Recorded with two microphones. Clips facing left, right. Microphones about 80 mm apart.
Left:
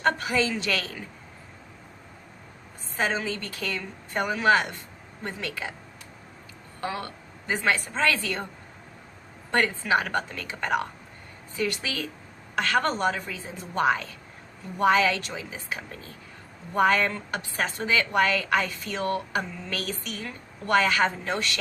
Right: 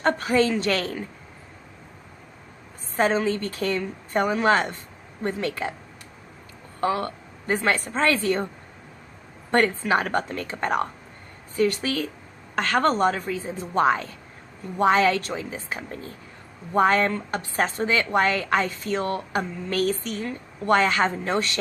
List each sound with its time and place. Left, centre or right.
0.0 s a woman's voice: right
3.0 s a woman's voice: right
6.8 s a woman's voice: right
9.5 s a woman's voice: right